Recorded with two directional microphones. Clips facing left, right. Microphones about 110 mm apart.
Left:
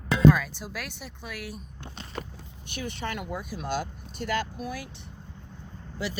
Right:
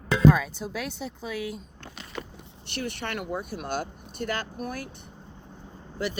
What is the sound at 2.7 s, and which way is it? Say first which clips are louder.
Speech: right 1 dB; 60° right (ahead or behind).